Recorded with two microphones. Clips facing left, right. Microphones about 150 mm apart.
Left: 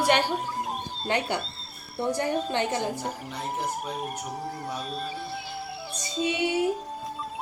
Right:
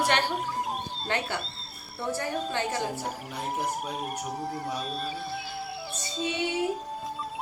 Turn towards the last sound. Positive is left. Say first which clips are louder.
# left 3 dB
turn(degrees=10)  # may be behind; listen again after turning